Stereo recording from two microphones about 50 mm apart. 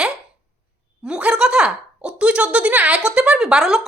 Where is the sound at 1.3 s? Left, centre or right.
Centre.